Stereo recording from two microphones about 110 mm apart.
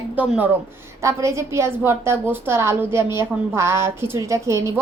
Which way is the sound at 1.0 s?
25° right (ahead or behind).